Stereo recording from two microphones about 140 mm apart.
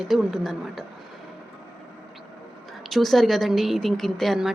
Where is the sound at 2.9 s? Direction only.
Centre (ahead or behind).